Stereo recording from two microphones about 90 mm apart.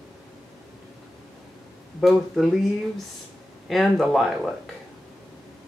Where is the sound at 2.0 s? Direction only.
Centre (ahead or behind).